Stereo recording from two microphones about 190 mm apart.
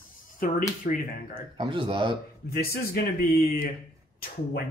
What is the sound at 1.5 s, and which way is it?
Speech, 25° right (ahead or behind).